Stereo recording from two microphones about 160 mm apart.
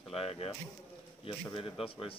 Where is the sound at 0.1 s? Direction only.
40° left (ahead or behind).